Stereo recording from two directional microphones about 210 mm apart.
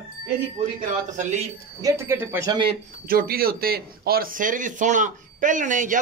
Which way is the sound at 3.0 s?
45° right (ahead or behind).